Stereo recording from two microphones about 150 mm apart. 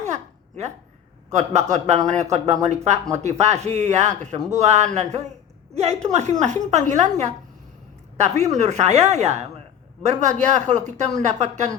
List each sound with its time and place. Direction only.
0.0 s babbling: 50° right (ahead or behind)
1.3 s a woman's voice: 50° right (ahead or behind)
8.5 s a woman's voice: 50° right (ahead or behind)